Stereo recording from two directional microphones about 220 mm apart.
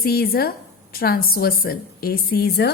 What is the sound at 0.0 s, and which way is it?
A woman's voice, 45° left (ahead or behind).